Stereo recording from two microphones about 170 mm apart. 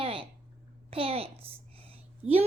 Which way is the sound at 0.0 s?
30° right (ahead or behind).